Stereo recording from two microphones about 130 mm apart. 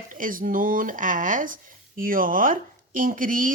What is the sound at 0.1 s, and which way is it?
Speech, 90° right.